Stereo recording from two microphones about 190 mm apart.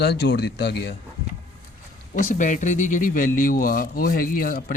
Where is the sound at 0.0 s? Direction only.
60° left (ahead or behind).